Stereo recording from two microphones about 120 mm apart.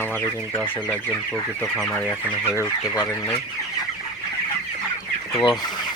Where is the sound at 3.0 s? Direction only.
30° left (ahead or behind).